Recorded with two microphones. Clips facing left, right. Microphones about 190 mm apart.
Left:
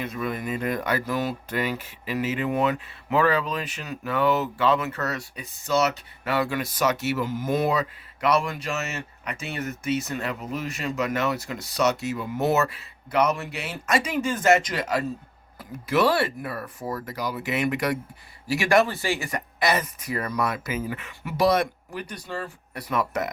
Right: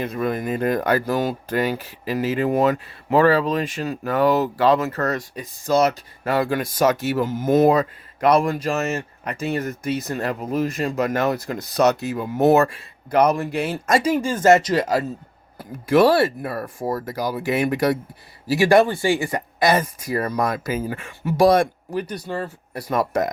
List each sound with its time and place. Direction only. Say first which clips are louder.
0.0 s speech: right 6 dB; 45° right (ahead or behind)
8.4 s speech: right 7 dB; 35° right (ahead or behind)
8.7 s speech: right 7 dB; 50° right (ahead or behind)
9.6 s speech: right 2 dB; 35° right (ahead or behind)
11.2 s speech: right 5 dB; 50° right (ahead or behind)
14.3 s speech: right 5 dB; 30° right (ahead or behind)
15.9 s speech: right 6 dB; 45° right (ahead or behind)